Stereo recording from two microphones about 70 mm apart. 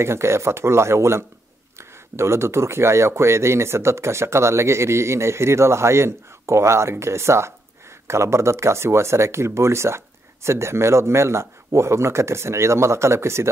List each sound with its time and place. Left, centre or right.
0.0 s speech: right